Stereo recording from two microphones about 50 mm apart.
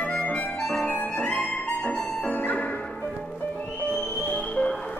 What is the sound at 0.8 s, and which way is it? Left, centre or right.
Music, left.